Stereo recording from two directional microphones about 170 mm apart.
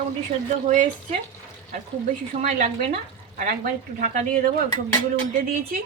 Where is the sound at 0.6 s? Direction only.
45° right (ahead or behind).